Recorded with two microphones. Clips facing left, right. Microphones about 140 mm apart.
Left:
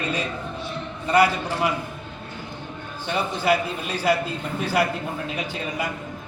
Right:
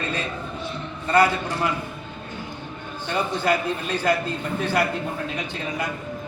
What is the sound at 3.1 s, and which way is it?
A man's voice, 10° left (ahead or behind).